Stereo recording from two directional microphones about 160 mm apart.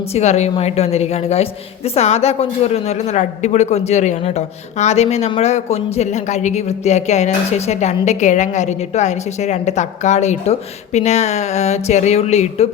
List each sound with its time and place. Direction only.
0.1 s a woman's voice: 45° left (ahead or behind)